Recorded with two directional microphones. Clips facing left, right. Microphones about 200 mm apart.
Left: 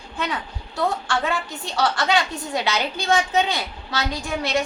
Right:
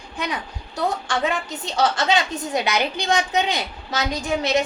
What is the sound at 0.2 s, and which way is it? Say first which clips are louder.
A child's voice: even; 15° right (ahead or behind).